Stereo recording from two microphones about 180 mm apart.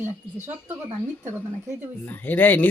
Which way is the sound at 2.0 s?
10° left (ahead or behind).